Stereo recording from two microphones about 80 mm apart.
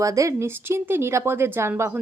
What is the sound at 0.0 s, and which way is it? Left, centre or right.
A woman's voice, right.